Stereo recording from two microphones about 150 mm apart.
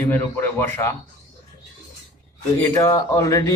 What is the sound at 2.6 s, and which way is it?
Speech, 20° left (ahead or behind).